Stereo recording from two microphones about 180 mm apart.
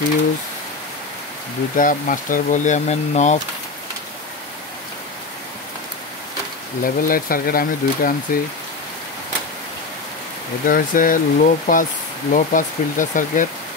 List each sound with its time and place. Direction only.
1.8 s speech: 50° left (ahead or behind)
6.8 s speech: 50° left (ahead or behind)
10.7 s speech: 50° left (ahead or behind)